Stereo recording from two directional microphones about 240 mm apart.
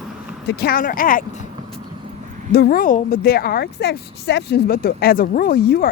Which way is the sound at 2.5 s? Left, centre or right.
Left.